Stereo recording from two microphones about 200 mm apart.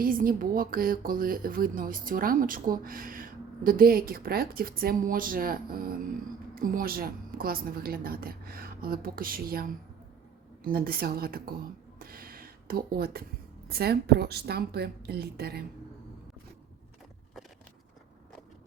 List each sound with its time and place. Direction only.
0.0 s speech: 45° right (ahead or behind)
11.9 s a sound: 45° right (ahead or behind)
13.7 s speech: 50° right (ahead or behind)